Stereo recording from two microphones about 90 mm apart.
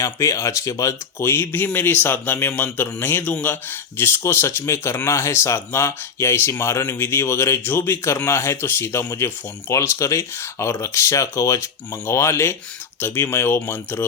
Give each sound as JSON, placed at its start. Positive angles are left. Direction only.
{"t": 0.0, "sound": "speech", "side_deg": 35}